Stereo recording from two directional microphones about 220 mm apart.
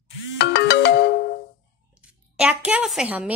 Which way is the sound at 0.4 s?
50° left (ahead or behind).